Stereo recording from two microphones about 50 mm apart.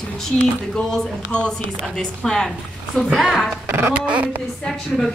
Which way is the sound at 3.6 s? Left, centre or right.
Right.